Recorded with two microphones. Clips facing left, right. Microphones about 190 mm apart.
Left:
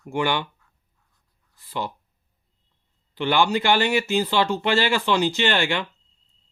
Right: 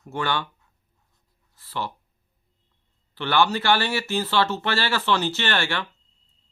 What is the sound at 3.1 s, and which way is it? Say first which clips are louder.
Speech: left 1 dB; 15° left (ahead or behind).